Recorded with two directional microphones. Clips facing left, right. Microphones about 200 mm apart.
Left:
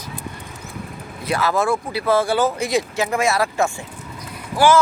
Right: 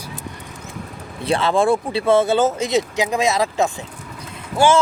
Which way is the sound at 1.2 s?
30° right (ahead or behind).